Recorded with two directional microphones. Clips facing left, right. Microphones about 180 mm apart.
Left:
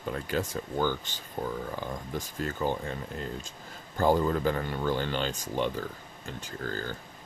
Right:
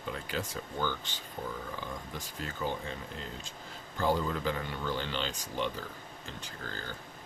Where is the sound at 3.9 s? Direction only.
45° left (ahead or behind).